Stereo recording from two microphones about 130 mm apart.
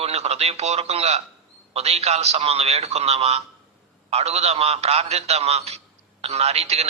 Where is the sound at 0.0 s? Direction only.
55° right (ahead or behind).